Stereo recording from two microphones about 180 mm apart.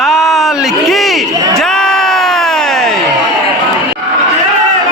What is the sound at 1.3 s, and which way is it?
Crowd, 20° right (ahead or behind).